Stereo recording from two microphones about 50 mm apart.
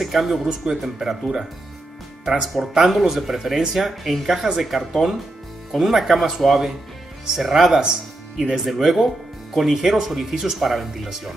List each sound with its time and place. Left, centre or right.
0.0 s speech: centre
2.4 s speech: centre
7.8 s speech: centre